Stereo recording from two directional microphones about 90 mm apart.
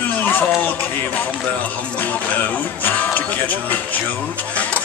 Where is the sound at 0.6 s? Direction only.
20° left (ahead or behind).